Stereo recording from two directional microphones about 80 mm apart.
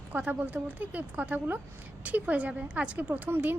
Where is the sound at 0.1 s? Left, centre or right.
Centre.